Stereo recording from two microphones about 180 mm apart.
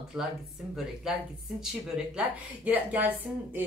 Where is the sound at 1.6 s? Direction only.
5° right (ahead or behind).